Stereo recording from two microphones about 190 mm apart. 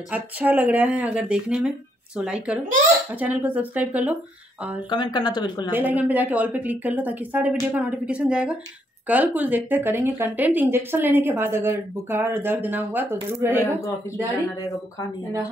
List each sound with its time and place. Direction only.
0.1 s speech: 10° right (ahead or behind)
4.8 s speech: 25° left (ahead or behind)
5.7 s speech: 10° right (ahead or behind)